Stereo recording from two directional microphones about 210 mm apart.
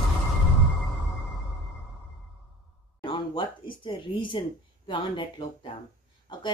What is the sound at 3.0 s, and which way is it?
Speech, 20° left (ahead or behind).